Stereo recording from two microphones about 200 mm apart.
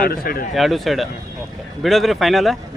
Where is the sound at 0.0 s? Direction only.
45° left (ahead or behind).